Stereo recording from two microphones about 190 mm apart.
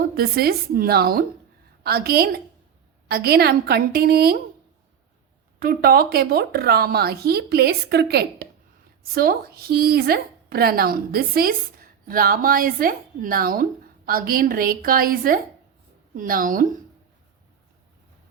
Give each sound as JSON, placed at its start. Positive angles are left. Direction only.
{"t": 0.0, "sound": "a woman's voice", "side_deg": -55}
{"t": 5.5, "sound": "a woman's voice", "side_deg": -50}